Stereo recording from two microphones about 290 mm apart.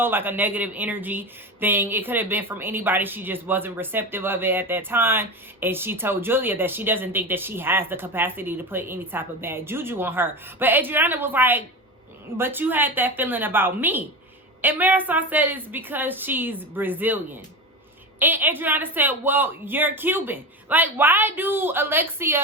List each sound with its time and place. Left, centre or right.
0.0 s speech: centre
18.2 s speech: centre